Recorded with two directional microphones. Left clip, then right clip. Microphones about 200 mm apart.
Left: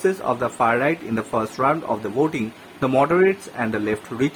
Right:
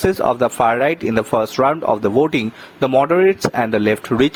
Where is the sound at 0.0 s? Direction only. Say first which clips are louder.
Right 6 dB; 40° right (ahead or behind).